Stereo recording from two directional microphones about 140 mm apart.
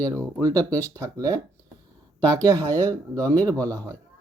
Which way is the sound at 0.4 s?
25° right (ahead or behind).